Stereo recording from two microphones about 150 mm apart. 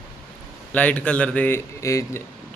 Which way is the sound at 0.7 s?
10° left (ahead or behind).